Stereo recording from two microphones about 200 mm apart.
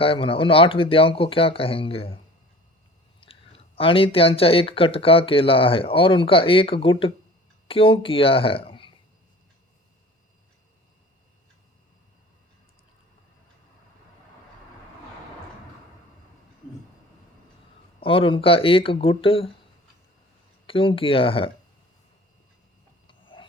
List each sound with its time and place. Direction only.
0.0 s speech: 25° left (ahead or behind)
3.2 s speech: 25° left (ahead or behind)
18.0 s speech: 25° left (ahead or behind)
20.7 s speech: 25° left (ahead or behind)
23.0 s a sound: 25° left (ahead or behind)